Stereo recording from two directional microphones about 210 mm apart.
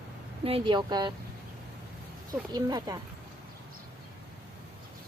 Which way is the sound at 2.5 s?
20° right (ahead or behind).